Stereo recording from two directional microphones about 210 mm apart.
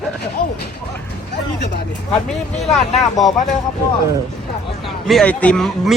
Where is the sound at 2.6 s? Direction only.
Centre (ahead or behind).